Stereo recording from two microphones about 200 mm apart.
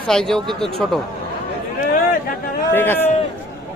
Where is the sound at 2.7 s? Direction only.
10° left (ahead or behind).